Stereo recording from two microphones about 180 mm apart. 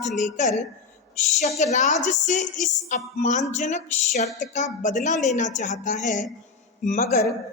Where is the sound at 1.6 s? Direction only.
40° left (ahead or behind).